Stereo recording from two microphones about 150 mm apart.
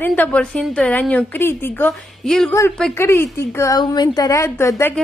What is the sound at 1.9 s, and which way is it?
Speech, 5° left (ahead or behind).